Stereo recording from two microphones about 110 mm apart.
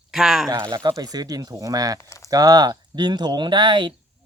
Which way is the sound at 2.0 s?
25° left (ahead or behind).